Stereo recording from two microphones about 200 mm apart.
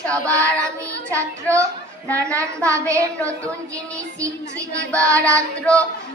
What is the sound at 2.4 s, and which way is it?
Speech, 15° right (ahead or behind).